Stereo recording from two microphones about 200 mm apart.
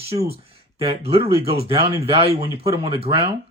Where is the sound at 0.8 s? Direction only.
30° right (ahead or behind).